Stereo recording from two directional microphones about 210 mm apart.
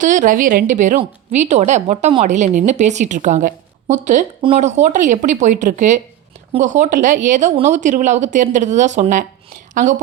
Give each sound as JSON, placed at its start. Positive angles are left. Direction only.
{"t": 0.0, "sound": "a woman's voice", "side_deg": -35}